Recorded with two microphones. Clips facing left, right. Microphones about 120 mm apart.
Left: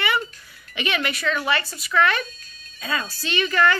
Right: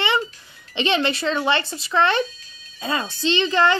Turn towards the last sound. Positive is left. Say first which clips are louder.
# right 2 dB
turn(degrees=-25)  # may be behind; listen again after turning